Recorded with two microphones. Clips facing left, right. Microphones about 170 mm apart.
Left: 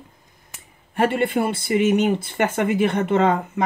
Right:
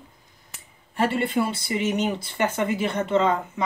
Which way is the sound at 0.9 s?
55° left (ahead or behind).